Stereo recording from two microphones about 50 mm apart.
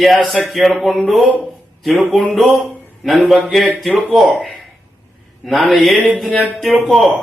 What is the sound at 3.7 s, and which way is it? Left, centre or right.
Music, centre.